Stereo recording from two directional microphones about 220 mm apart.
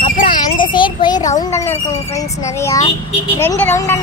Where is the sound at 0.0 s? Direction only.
25° left (ahead or behind).